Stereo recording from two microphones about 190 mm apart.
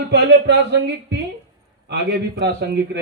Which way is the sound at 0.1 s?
60° right (ahead or behind).